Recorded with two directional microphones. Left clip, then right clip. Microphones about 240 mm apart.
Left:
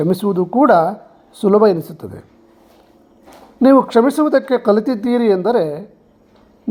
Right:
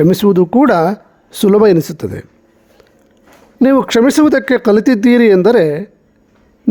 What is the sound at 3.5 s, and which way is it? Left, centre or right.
Speech, right.